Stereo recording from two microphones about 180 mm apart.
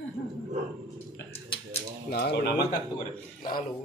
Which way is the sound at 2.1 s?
65° left (ahead or behind).